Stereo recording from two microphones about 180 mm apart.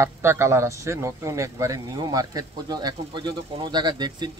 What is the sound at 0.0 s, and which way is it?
Speech, 15° right (ahead or behind).